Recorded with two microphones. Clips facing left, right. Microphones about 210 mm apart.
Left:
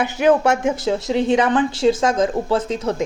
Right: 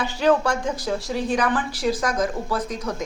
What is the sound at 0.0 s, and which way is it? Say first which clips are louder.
Speech: left 4 dB; 20° left (ahead or behind).